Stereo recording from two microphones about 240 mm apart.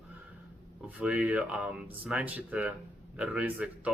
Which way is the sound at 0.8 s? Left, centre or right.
Centre.